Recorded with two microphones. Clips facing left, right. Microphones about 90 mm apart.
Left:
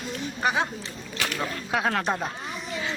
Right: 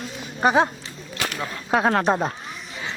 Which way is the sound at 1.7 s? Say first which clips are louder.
Right 7 dB; 40° right (ahead or behind).